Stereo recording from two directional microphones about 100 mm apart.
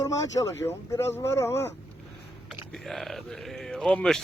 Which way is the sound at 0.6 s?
25° left (ahead or behind).